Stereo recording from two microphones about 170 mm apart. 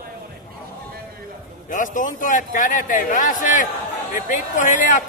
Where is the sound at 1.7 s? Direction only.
50° left (ahead or behind).